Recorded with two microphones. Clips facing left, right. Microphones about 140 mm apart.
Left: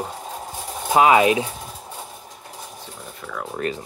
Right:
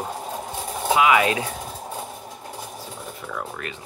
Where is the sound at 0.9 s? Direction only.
40° left (ahead or behind).